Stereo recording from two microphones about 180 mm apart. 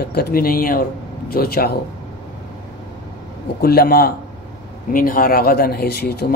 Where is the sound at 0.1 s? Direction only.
60° left (ahead or behind).